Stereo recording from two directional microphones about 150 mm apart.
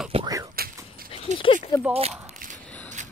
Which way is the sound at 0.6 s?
80° right.